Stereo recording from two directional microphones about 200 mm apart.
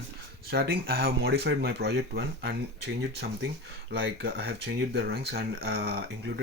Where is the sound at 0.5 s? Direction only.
50° right (ahead or behind).